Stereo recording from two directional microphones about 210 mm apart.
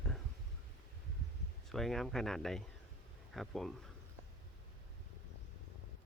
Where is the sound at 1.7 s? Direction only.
Centre (ahead or behind).